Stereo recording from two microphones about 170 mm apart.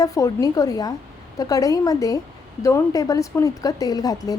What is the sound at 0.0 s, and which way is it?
A woman's voice, 20° left (ahead or behind).